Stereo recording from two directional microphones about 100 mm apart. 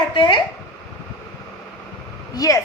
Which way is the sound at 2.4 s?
35° left (ahead or behind).